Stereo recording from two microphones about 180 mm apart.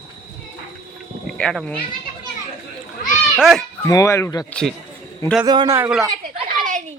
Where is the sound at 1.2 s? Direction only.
Centre (ahead or behind).